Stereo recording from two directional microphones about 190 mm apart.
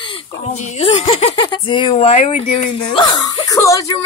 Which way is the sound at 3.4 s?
15° left (ahead or behind).